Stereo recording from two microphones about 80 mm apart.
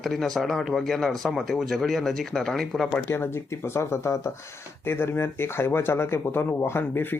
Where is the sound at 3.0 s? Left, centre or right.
Left.